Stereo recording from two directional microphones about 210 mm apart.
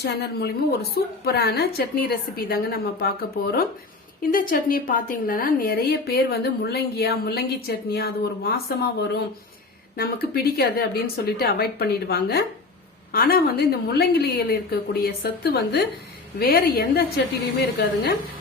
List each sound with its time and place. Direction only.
0.0 s a woman's voice: 50° left (ahead or behind)